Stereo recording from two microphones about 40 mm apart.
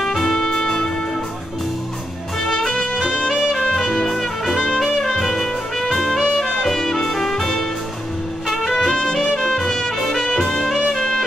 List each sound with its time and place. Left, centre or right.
0.0 s music: centre
0.5 s music: centre
2.5 s music: centre
6.2 s music: centre